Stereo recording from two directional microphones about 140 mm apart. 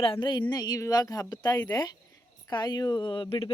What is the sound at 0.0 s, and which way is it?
Speech, 35° left (ahead or behind).